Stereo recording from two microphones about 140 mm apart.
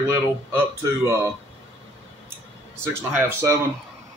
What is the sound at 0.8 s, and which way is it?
Speech, 20° right (ahead or behind).